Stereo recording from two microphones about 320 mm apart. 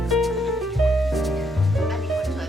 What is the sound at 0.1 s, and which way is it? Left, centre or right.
Music, centre.